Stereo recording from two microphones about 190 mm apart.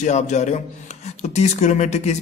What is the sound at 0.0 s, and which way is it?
Speech, 40° left (ahead or behind).